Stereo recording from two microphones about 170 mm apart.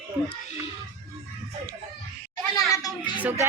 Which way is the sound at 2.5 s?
20° left (ahead or behind).